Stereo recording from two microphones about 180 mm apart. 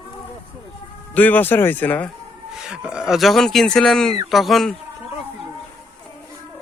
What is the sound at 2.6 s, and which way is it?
Speech, 5° right (ahead or behind).